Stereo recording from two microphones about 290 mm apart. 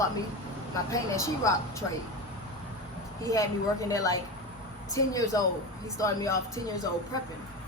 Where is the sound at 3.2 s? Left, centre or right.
Centre.